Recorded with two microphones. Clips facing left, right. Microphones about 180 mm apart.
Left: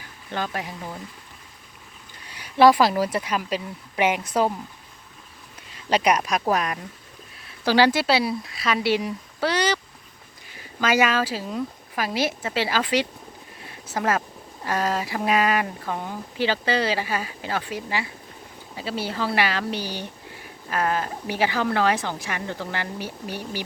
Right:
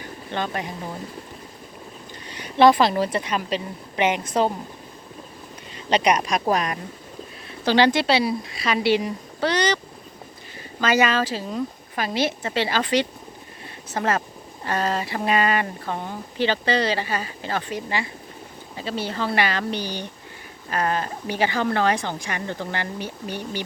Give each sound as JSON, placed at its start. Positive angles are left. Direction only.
{"t": 0.0, "sound": "bird", "side_deg": 5}
{"t": 2.2, "sound": "speech", "side_deg": 5}
{"t": 5.7, "sound": "a woman's voice", "side_deg": 5}
{"t": 13.7, "sound": "a sound", "side_deg": 5}
{"t": 14.6, "sound": "a woman's voice", "side_deg": 5}